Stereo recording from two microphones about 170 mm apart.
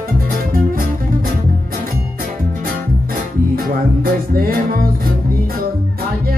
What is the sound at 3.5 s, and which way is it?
Music, 60° right (ahead or behind).